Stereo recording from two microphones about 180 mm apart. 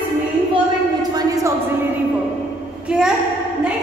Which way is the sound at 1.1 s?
20° right (ahead or behind).